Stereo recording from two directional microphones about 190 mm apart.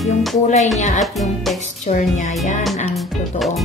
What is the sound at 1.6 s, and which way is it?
Speech, 40° left (ahead or behind).